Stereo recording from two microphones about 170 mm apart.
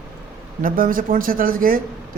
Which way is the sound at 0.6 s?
55° right (ahead or behind).